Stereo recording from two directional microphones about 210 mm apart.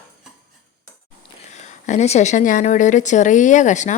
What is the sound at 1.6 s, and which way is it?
A woman's voice, 35° left (ahead or behind).